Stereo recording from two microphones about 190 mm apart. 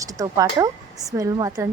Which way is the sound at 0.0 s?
15° right (ahead or behind).